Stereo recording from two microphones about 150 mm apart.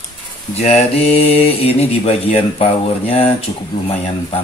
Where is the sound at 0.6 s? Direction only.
45° left (ahead or behind).